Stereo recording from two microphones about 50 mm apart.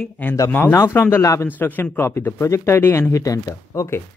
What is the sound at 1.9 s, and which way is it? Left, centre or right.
Speech, left.